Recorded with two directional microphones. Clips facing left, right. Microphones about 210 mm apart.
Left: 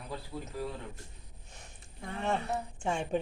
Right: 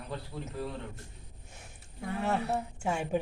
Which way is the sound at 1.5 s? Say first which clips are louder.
Right 3 dB; 5° right (ahead or behind).